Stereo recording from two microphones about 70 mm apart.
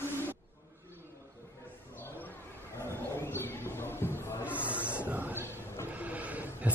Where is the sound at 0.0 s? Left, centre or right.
Left.